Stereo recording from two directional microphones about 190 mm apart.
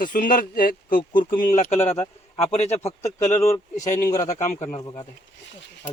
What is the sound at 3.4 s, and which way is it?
Speech, 15° left (ahead or behind).